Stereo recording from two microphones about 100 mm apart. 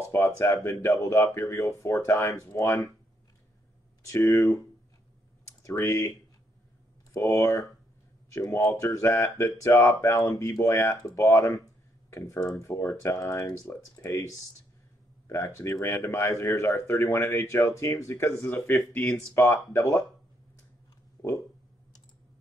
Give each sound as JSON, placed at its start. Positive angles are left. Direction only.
{"t": 0.1, "sound": "speech", "side_deg": 30}
{"t": 4.1, "sound": "speech", "side_deg": 30}
{"t": 5.5, "sound": "speech", "side_deg": 30}
{"t": 7.2, "sound": "speech", "side_deg": 30}
{"t": 19.1, "sound": "speech", "side_deg": 25}
{"t": 21.2, "sound": "a sound", "side_deg": 30}